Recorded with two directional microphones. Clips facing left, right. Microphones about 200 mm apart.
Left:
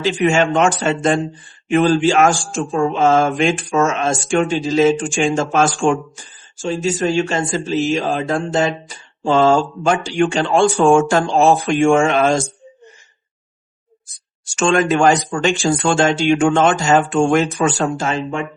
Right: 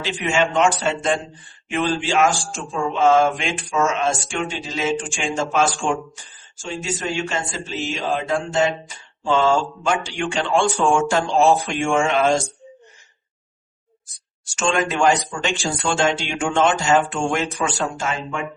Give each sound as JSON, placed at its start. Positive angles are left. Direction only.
{"t": 0.0, "sound": "speech", "side_deg": 45}
{"t": 14.5, "sound": "speech", "side_deg": 50}